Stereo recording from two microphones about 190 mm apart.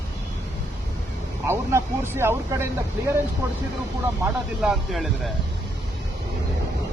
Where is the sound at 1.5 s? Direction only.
15° right (ahead or behind).